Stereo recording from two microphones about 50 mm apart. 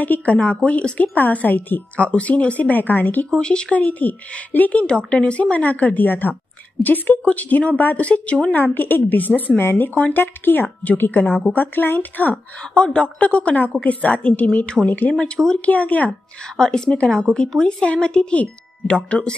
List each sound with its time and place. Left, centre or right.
0.0 s a woman's voice: left
2.0 s speech: left
3.3 s a woman's voice: centre
3.7 s speech: left
4.8 s a woman's voice: left
8.7 s speech: left
9.6 s speech: left
9.9 s speech: left
12.7 s a woman's voice: left
15.1 s a woman's voice: centre
15.6 s speech: left
16.5 s a woman's voice: centre